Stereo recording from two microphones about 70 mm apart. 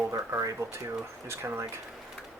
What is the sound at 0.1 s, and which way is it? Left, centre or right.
Speech, right.